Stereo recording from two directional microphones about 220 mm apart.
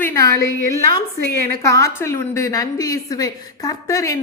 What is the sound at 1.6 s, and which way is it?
A woman's voice, 15° left (ahead or behind).